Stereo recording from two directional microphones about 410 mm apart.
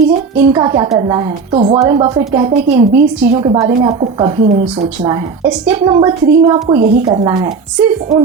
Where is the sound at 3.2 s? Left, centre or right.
Centre.